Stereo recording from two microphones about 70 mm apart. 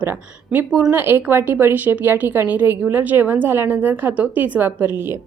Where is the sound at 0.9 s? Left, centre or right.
Right.